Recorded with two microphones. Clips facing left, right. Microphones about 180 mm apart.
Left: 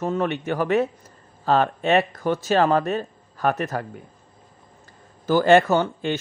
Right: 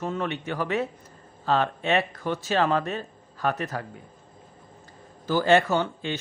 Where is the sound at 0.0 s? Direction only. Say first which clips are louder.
Left 5 dB; 45° left (ahead or behind).